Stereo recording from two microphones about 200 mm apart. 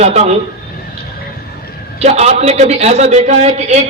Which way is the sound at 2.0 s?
30° right (ahead or behind).